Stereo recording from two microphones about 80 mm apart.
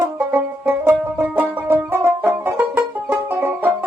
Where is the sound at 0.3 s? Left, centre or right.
Right.